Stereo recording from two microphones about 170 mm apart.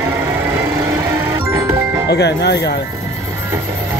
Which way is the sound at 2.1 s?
85° left.